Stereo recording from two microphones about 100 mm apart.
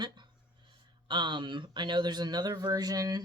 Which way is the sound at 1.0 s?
50° right (ahead or behind).